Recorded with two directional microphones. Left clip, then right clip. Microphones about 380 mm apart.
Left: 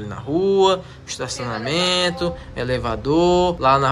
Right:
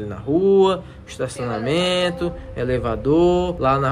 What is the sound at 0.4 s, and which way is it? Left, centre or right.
Speech, centre.